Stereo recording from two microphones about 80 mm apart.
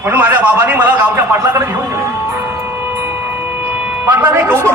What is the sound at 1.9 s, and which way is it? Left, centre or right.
Music, right.